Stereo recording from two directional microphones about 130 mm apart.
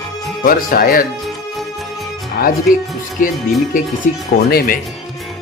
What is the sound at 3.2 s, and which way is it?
Speech, 90° left.